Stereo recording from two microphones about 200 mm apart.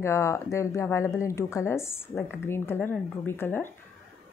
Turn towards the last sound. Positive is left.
turn(degrees=10)  # may be behind; listen again after turning